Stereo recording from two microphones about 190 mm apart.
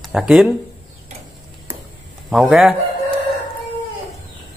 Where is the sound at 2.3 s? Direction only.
Centre (ahead or behind).